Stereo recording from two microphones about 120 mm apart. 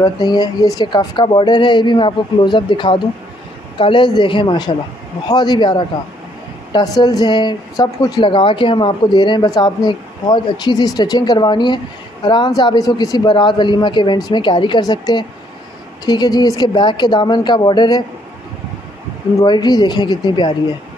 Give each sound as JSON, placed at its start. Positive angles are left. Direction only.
{"t": 0.0, "sound": "speech", "side_deg": 35}
{"t": 7.0, "sound": "speech", "side_deg": 35}
{"t": 19.4, "sound": "speech", "side_deg": 35}